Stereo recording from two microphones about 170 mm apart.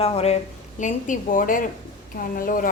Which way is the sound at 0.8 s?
50° left (ahead or behind).